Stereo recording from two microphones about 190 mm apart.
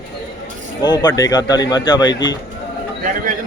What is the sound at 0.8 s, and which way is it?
Speech, 20° left (ahead or behind).